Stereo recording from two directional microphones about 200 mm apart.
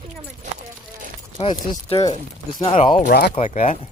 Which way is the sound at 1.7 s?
20° left (ahead or behind).